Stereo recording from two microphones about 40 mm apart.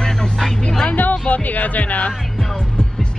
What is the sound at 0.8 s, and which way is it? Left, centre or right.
Music, left.